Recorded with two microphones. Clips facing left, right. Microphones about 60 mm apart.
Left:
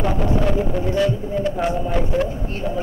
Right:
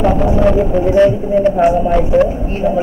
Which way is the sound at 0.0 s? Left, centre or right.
Right.